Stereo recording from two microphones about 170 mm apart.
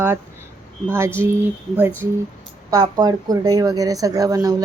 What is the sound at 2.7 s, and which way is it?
Speech, 20° right (ahead or behind).